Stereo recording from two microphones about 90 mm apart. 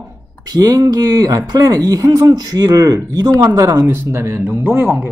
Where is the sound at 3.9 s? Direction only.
30° right (ahead or behind).